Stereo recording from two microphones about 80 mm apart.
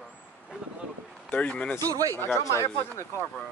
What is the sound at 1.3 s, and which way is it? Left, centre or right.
Speech, centre.